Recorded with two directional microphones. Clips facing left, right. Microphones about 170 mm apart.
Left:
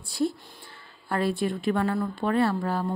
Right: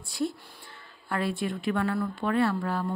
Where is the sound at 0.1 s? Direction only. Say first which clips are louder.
Left 3 dB; 35° left (ahead or behind).